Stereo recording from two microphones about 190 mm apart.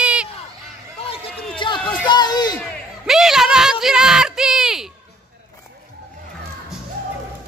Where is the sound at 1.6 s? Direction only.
25° left (ahead or behind).